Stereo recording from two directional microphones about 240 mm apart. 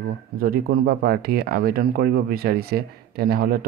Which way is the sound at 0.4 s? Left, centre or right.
Right.